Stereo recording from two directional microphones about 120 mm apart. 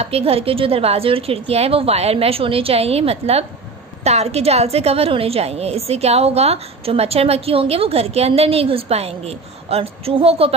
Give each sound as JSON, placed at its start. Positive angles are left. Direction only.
{"t": 0.0, "sound": "a woman's voice", "side_deg": -55}